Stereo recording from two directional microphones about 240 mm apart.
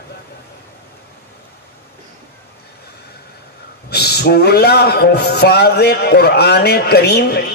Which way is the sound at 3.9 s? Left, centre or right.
Left.